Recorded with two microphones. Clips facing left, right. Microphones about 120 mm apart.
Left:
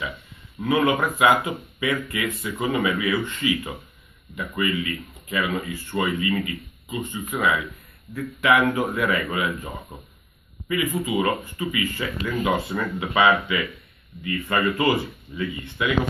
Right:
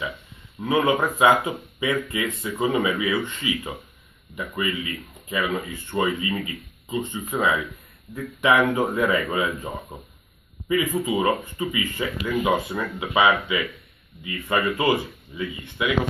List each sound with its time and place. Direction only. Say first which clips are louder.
0.7 s speech: even; 25° right (ahead or behind)
5.3 s speech: even; 25° right (ahead or behind)
9.9 s speech: right 2 dB; 15° right (ahead or behind)
10.7 s speech: right 2 dB; 25° right (ahead or behind)